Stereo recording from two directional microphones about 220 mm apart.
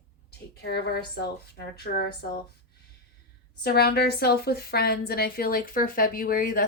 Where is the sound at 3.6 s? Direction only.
45° left (ahead or behind).